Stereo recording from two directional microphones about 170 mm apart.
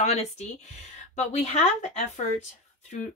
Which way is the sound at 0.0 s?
40° left (ahead or behind).